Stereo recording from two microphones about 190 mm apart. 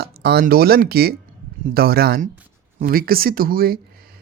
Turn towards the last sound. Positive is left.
turn(degrees=-50)  # may be behind; listen again after turning